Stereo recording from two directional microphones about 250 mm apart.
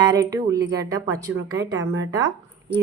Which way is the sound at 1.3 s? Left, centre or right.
Right.